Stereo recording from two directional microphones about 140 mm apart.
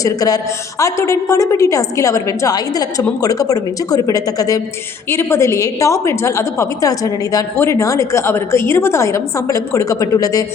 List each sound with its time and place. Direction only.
0.0 s a woman's voice: 25° left (ahead or behind)